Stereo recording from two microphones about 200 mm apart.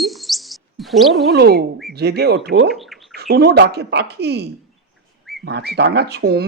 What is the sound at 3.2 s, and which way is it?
Speech, 55° right (ahead or behind).